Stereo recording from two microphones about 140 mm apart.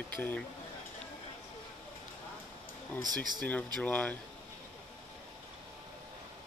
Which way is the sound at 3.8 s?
10° left (ahead or behind).